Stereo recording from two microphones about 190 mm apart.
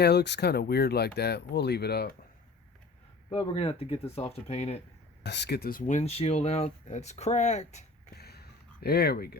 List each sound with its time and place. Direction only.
0.0 s speech: 60° left (ahead or behind)
3.2 s speech: 30° left (ahead or behind)
5.2 s speech: 60° left (ahead or behind); by 7.9 s 35° left (ahead or behind)
8.1 s a sound: 55° left (ahead or behind)